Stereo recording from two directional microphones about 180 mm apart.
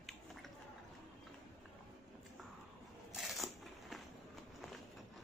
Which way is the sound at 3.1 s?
Centre (ahead or behind).